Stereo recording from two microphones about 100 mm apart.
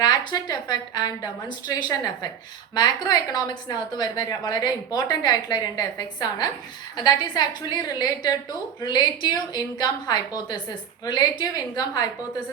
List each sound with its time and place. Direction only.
0.0 s a woman's voice: 45° left (ahead or behind)